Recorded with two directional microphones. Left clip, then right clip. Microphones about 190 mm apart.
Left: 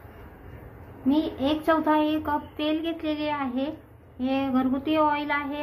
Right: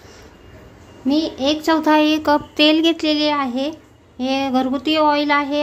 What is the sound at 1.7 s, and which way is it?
A woman's voice, 60° right (ahead or behind).